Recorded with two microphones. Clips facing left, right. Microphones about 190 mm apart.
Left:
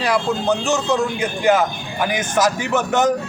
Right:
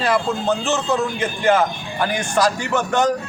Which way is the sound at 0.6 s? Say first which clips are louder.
Left 1 dB; 15° left (ahead or behind).